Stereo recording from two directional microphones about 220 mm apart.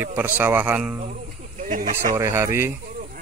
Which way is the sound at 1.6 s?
35° right (ahead or behind).